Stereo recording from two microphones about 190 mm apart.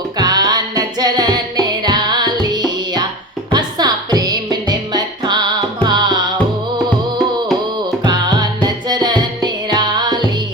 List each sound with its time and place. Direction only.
0.2 s music: 20° right (ahead or behind)
8.0 s music: 20° right (ahead or behind)